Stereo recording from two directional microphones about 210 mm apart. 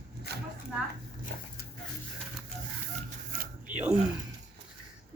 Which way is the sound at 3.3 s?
45° right (ahead or behind).